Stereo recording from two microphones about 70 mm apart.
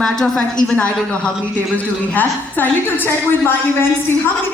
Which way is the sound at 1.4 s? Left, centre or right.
Left.